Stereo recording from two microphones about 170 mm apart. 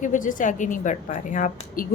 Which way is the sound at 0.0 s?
50° left (ahead or behind).